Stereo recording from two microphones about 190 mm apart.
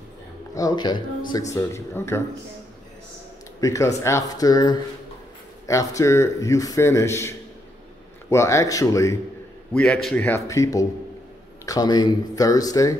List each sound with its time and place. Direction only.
0.6 s a man's voice: 20° left (ahead or behind)
3.6 s a man's voice: 15° left (ahead or behind)